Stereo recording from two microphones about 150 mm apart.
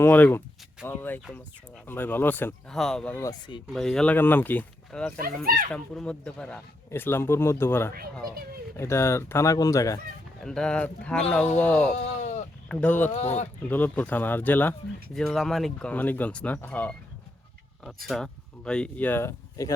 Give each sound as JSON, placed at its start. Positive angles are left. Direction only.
{"t": 0.0, "sound": "speech", "side_deg": 10}
{"t": 3.2, "sound": "speech", "side_deg": 25}
{"t": 3.7, "sound": "speech", "side_deg": 0}
{"t": 8.2, "sound": "speech", "side_deg": -80}
{"t": 8.7, "sound": "speech", "side_deg": 20}
{"t": 10.4, "sound": "speech", "side_deg": 5}
{"t": 13.1, "sound": "speech", "side_deg": 45}
{"t": 13.6, "sound": "speech", "side_deg": 10}
{"t": 15.1, "sound": "speech", "side_deg": 0}
{"t": 18.1, "sound": "speech", "side_deg": 5}